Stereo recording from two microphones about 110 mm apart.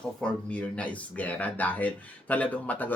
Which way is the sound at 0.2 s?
10° left (ahead or behind).